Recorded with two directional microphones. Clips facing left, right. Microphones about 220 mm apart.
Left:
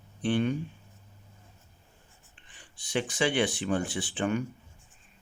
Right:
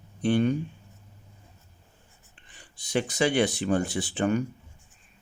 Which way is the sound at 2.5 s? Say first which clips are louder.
Right 3 dB; 40° right (ahead or behind).